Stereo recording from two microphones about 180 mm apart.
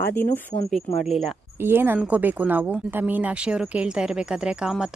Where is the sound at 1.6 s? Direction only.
10° right (ahead or behind).